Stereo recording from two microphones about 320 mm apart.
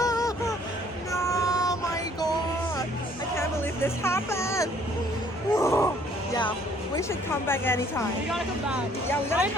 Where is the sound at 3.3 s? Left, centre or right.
Centre.